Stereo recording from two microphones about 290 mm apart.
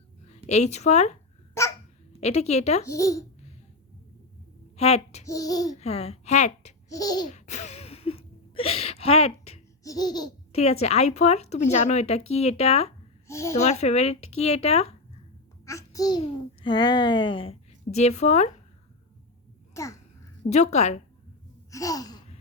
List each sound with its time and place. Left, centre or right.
0.3 s speech: left
2.2 s speech: left
2.9 s a woman's voice: centre
4.8 s a woman's voice: left
6.8 s babbling: centre
7.3 s speech: left
13.2 s a child's voice: centre
13.6 s speech: left
15.6 s babbling: centre
16.6 s a woman's voice: centre
19.8 s a woman's voice: centre
20.5 s speech: left
21.7 s sigh: centre